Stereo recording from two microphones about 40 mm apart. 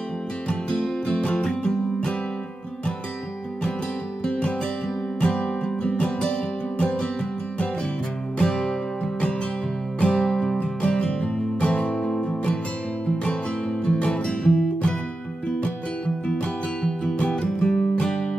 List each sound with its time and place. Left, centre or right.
0.7 s music: centre
4.2 s music: left
8.4 s music: centre
10.1 s music: centre
10.6 s music: left
13.8 s music: left
16.8 s music: centre